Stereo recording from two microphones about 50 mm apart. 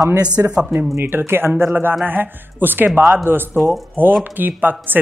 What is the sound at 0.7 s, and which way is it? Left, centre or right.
Speech, right.